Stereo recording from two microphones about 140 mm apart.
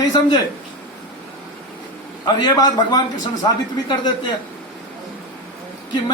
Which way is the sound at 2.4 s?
30° left (ahead or behind).